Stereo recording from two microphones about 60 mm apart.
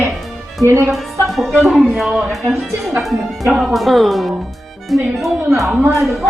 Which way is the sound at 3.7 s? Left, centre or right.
Centre.